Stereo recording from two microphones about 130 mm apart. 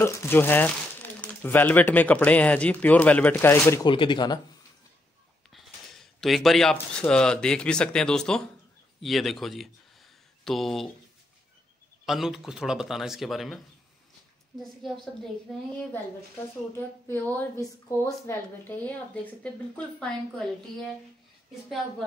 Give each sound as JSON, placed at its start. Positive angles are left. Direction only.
{"t": 0.0, "sound": "speech", "side_deg": 20}
{"t": 3.8, "sound": "speech", "side_deg": 40}
{"t": 6.2, "sound": "speech", "side_deg": 0}
{"t": 12.1, "sound": "speech", "side_deg": -5}
{"t": 17.1, "sound": "speech", "side_deg": 15}